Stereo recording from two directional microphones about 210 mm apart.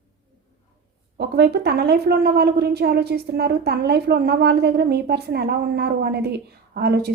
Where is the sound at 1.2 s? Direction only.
50° right (ahead or behind).